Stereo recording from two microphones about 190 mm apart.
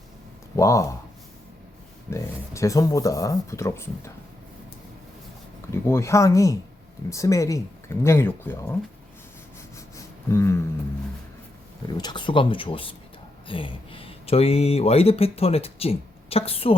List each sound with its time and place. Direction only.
0.5 s speech: 15° left (ahead or behind)
2.0 s speech: 15° left (ahead or behind)
5.7 s speech: 15° left (ahead or behind)
10.2 s speech: 15° left (ahead or behind)
11.9 s speech: 20° left (ahead or behind)